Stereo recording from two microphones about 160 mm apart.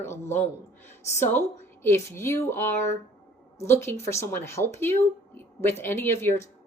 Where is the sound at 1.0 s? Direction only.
15° left (ahead or behind).